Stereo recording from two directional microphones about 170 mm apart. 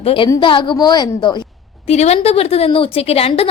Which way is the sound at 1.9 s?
40° left (ahead or behind).